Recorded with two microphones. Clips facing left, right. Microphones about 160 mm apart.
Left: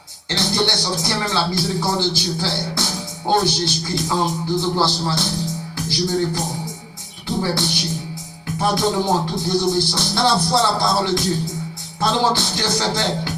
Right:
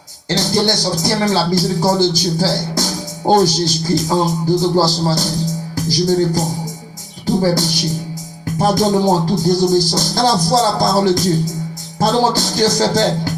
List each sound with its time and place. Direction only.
0.3 s music: 40° right (ahead or behind)
5.7 s speech: 40° right (ahead or behind)
8.5 s music: 40° right (ahead or behind)